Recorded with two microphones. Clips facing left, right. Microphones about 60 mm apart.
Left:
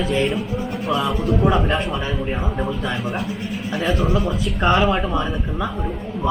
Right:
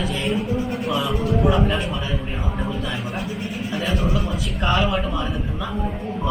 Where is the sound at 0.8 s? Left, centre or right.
Centre.